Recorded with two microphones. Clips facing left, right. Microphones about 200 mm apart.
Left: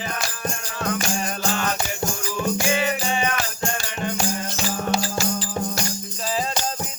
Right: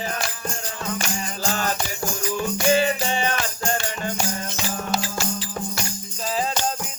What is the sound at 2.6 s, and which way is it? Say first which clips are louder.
Music: right 3 dB; 35° right (ahead or behind).